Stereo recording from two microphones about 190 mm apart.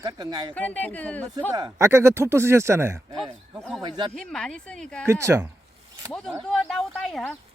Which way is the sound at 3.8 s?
25° right (ahead or behind).